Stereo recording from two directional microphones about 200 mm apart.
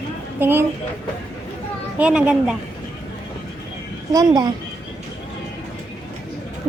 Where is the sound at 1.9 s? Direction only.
5° right (ahead or behind).